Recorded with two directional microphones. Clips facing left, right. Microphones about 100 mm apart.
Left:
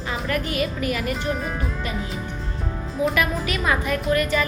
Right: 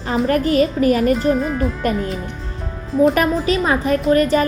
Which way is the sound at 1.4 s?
Centre (ahead or behind).